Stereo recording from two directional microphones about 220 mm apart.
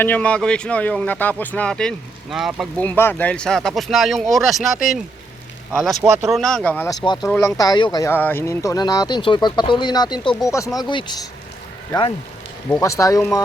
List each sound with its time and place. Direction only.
0.0 s speech: 5° left (ahead or behind)
7.0 s speech: 20° left (ahead or behind)